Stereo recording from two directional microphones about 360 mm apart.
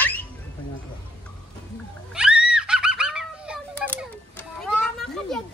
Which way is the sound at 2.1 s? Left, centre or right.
Centre.